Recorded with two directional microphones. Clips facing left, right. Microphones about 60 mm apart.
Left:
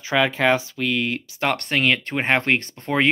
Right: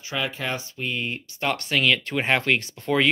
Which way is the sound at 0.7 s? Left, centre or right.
Left.